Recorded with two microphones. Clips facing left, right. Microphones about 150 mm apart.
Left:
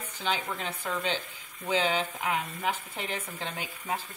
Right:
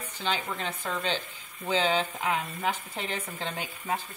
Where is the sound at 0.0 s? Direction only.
10° left (ahead or behind).